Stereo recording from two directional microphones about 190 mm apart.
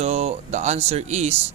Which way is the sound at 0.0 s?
35° right (ahead or behind).